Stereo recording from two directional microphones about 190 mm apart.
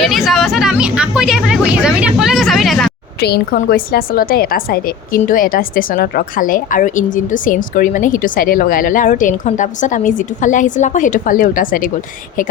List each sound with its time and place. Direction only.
0.0 s speech: centre (ahead or behind)
3.2 s a woman's voice: 55° left (ahead or behind)